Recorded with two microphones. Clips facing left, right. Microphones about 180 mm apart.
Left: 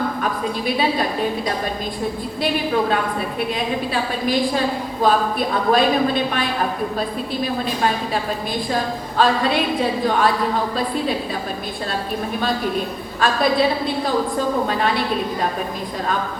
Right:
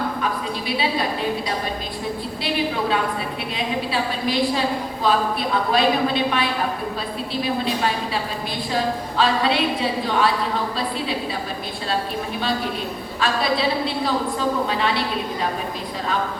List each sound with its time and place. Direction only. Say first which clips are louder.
3.9 s a woman's voice: left 2 dB; 50° left (ahead or behind)
8.7 s a woman's voice: right 2 dB; 45° left (ahead or behind)
13.1 s a woman's voice: left 4 dB; 50° left (ahead or behind)